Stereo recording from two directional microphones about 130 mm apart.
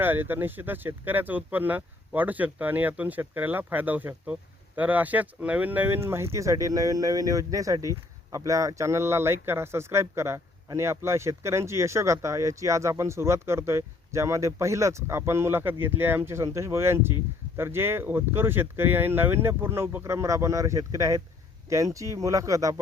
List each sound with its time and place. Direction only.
0.0 s speech: 15° right (ahead or behind)